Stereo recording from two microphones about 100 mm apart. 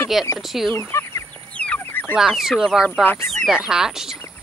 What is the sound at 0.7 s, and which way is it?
Fowl, 30° left (ahead or behind).